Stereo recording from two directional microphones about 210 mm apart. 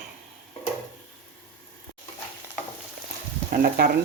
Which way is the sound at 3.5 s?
45° right (ahead or behind).